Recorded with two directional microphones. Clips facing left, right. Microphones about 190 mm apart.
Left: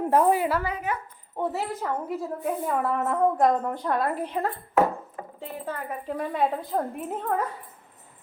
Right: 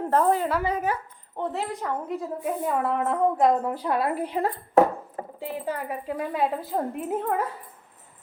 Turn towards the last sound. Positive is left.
turn(degrees=-5)  # may be behind; listen again after turning